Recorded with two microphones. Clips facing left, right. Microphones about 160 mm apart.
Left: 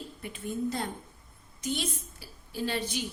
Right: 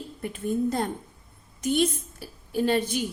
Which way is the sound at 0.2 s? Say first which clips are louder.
Right 7 dB; 50° right (ahead or behind).